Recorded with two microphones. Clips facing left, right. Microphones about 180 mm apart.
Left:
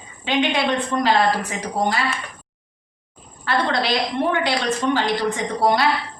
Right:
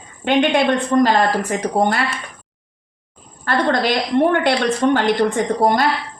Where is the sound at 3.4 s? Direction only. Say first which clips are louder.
Right 4 dB; 50° right (ahead or behind).